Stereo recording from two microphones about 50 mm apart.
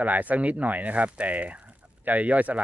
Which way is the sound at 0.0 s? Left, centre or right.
Right.